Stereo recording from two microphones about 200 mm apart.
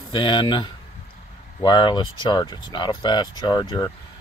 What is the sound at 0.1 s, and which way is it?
Speech, 25° left (ahead or behind).